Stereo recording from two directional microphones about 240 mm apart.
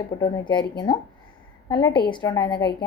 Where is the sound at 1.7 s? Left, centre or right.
Centre.